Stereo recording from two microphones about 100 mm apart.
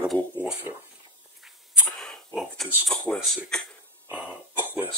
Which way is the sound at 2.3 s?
Centre (ahead or behind).